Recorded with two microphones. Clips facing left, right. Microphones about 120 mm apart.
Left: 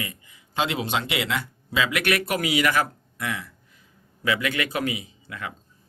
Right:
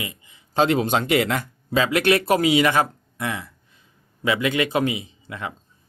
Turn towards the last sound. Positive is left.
turn(degrees=-25)  # may be behind; listen again after turning